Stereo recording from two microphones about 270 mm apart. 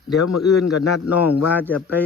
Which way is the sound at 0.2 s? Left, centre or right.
Left.